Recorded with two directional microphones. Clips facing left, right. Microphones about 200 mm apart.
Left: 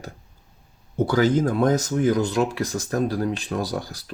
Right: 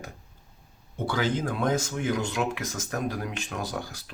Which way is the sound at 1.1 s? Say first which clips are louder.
Left 7 dB; 40° left (ahead or behind).